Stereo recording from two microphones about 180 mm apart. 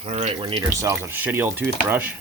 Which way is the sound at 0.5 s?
15° right (ahead or behind).